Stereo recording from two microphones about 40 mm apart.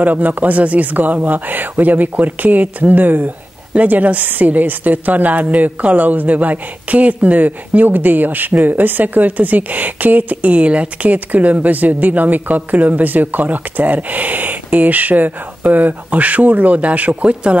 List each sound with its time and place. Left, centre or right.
0.0 s a woman's voice: right